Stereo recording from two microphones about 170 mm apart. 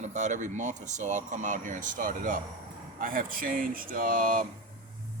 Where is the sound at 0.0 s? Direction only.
45° right (ahead or behind).